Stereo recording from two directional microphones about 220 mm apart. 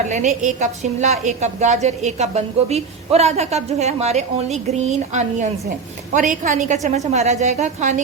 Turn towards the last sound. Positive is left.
turn(degrees=-30)  # may be behind; listen again after turning